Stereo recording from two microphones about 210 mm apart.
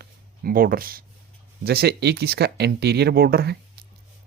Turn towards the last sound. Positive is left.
turn(degrees=-45)  # may be behind; listen again after turning